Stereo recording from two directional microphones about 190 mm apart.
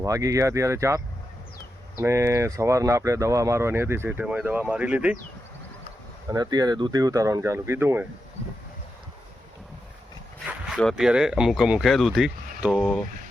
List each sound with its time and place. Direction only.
0.0 s speech: 15° right (ahead or behind)
6.2 s speech: 20° right (ahead or behind)
10.8 s speech: centre (ahead or behind)